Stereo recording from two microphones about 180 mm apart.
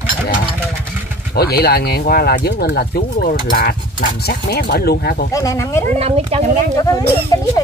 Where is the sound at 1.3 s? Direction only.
60° left (ahead or behind).